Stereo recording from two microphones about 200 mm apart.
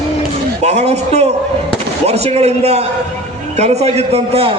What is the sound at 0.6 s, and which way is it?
A man's voice, 35° right (ahead or behind).